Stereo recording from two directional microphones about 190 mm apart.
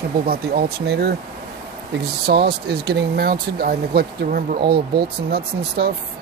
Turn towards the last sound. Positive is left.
turn(degrees=-55)  # may be behind; listen again after turning